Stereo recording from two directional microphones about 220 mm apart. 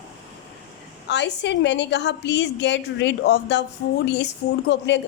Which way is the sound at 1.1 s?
50° left (ahead or behind).